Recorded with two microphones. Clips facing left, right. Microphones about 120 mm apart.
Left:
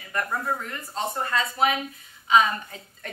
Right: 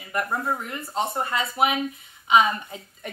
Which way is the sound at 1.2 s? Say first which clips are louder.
Left 3 dB; 15° right (ahead or behind).